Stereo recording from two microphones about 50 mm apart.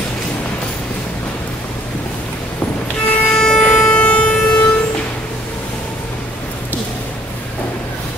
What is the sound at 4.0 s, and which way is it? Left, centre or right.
Vehicle, left.